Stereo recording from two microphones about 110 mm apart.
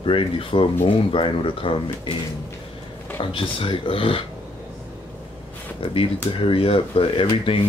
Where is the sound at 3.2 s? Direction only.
50° left (ahead or behind).